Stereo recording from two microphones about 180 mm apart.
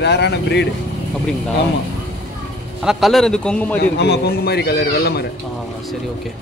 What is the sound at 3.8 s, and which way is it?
Speech, 65° left (ahead or behind).